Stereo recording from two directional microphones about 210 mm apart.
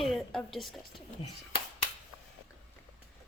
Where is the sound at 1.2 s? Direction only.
25° left (ahead or behind).